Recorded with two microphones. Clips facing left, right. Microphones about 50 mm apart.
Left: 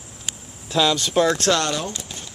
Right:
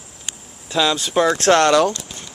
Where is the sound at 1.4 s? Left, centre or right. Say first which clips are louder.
Right 7 dB; right.